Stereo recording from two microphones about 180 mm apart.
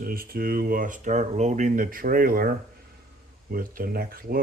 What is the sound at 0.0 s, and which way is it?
Speech, 55° right (ahead or behind).